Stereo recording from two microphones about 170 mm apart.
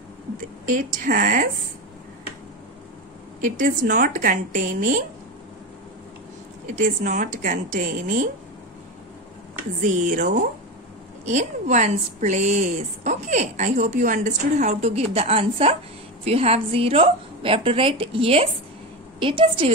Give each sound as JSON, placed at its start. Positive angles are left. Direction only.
{"t": 0.7, "sound": "a woman's voice", "side_deg": -50}
{"t": 3.3, "sound": "a woman's voice", "side_deg": -50}
{"t": 6.7, "sound": "a woman's voice", "side_deg": -50}
{"t": 9.8, "sound": "a woman's voice", "side_deg": -50}